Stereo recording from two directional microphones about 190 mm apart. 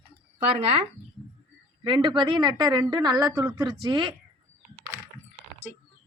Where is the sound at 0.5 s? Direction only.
30° right (ahead or behind).